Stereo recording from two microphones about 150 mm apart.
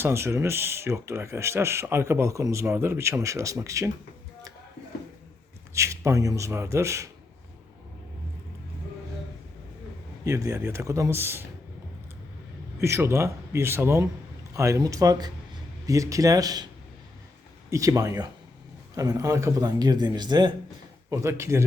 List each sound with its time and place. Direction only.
0.0 s speech: 20° right (ahead or behind)
5.7 s speech: 20° right (ahead or behind)
10.2 s speech: 20° right (ahead or behind)
12.8 s speech: 15° right (ahead or behind)
17.7 s speech: 20° right (ahead or behind)